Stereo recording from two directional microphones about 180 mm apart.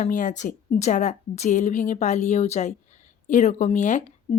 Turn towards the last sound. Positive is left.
turn(degrees=35)  # may be behind; listen again after turning